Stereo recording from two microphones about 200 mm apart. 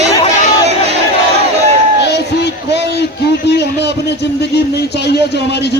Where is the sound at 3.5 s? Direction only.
55° left (ahead or behind).